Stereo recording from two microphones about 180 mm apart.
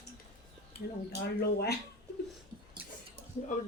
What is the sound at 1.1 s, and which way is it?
Speech, 60° left (ahead or behind).